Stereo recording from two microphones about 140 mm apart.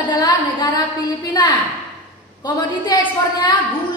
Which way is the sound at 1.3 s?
30° left (ahead or behind).